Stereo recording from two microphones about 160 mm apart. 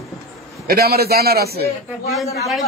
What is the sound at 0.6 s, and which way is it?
A man's voice, 75° right (ahead or behind).